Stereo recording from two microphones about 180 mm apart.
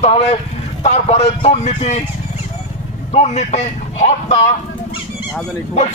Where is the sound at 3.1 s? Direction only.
40° left (ahead or behind).